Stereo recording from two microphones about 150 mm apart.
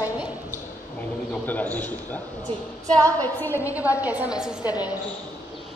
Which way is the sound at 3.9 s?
10° right (ahead or behind).